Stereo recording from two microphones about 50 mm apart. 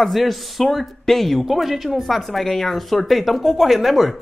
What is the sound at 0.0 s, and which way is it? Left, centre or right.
Speech, centre.